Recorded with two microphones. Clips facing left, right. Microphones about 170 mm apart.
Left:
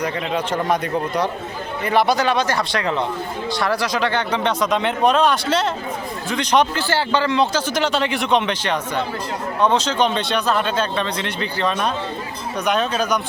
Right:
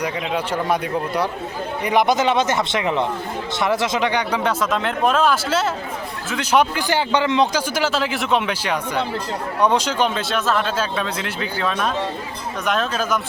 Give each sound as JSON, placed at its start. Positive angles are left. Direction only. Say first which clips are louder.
{"t": 0.0, "sound": "speech", "louder": "left 1 dB", "side_deg": -10}
{"t": 7.7, "sound": "speech", "louder": "left 1 dB", "side_deg": -5}